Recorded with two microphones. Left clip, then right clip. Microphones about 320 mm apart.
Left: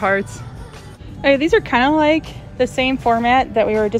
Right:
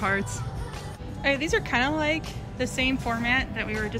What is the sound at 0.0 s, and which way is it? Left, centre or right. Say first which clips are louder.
A woman's voice: left 9 dB; centre.